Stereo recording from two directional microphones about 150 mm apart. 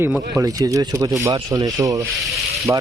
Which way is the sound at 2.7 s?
10° right (ahead or behind).